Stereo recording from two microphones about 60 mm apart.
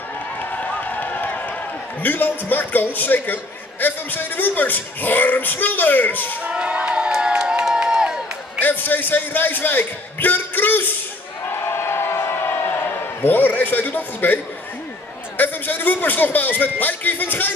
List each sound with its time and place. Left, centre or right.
0.4 s run: left
2.0 s speech: left
6.4 s crowd: centre
8.5 s a man's voice: left
11.6 s a sound: left
16.8 s speech: left